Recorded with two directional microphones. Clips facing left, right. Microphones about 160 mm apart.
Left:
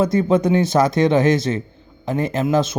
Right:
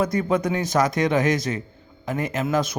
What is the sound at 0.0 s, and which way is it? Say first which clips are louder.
Speech: left 5 dB; 25° left (ahead or behind).